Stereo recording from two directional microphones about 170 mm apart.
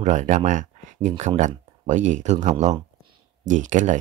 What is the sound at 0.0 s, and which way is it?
Speech, 45° right (ahead or behind).